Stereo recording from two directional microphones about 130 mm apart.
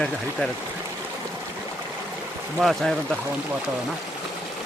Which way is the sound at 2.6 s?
Centre (ahead or behind).